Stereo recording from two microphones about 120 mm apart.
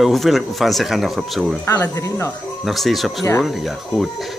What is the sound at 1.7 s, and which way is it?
Speech, 20° left (ahead or behind).